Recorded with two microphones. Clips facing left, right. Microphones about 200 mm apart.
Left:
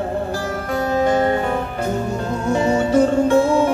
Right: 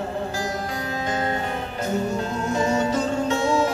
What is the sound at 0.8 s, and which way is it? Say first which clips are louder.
Music: left 12 dB; 60° left (ahead or behind).